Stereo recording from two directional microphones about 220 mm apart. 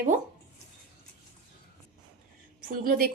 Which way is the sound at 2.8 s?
40° right (ahead or behind).